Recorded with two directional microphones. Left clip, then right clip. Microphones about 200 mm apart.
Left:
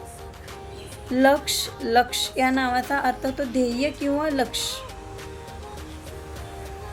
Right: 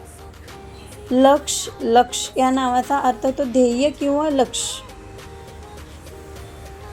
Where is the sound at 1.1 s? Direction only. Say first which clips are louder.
Right 4 dB; 15° right (ahead or behind).